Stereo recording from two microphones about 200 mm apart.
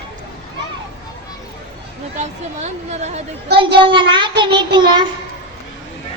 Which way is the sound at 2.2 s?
35° right (ahead or behind).